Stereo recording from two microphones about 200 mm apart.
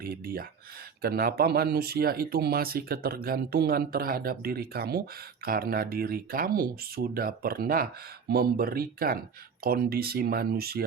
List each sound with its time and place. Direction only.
0.0 s speech: 50° right (ahead or behind)